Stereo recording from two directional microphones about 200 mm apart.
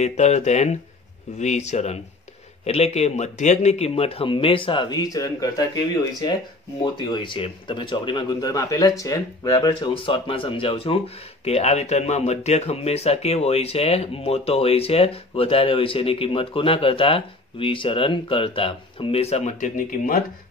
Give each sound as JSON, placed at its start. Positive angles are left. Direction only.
{"t": 0.0, "sound": "speech", "side_deg": 35}
{"t": 6.8, "sound": "speech", "side_deg": 20}